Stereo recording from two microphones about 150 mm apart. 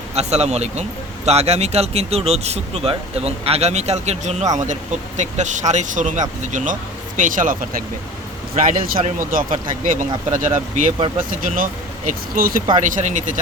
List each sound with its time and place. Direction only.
0.1 s speech: 45° right (ahead or behind); by 12.6 s 70° right (ahead or behind)
12.8 s speech: 55° right (ahead or behind)